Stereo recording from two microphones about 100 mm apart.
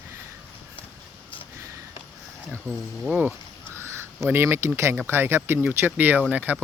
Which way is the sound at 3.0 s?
15° right (ahead or behind).